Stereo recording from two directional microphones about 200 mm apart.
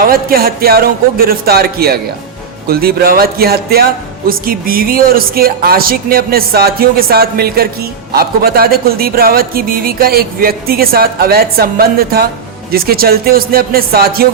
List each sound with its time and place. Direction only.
0.0 s speech: 50° right (ahead or behind)